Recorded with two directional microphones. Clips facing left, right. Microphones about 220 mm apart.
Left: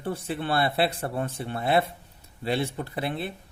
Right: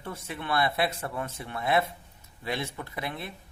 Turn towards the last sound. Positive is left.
turn(degrees=30)  # may be behind; listen again after turning